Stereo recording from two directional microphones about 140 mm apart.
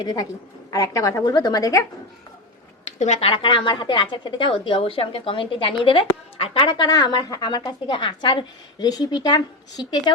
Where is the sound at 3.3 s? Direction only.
35° left (ahead or behind).